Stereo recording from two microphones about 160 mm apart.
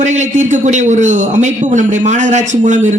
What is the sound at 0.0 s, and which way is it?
A man's voice, 50° right (ahead or behind).